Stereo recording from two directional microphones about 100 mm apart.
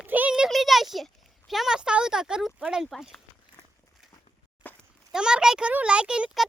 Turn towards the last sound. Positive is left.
turn(degrees=-10)  # may be behind; listen again after turning